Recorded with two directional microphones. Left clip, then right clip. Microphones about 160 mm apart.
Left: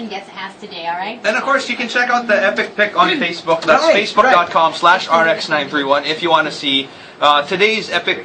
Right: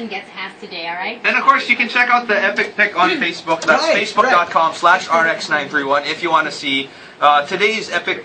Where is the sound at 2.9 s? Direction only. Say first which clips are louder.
Left 1 dB; 20° left (ahead or behind).